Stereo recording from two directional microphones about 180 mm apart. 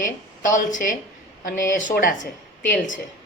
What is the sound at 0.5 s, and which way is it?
A woman's voice, 45° left (ahead or behind).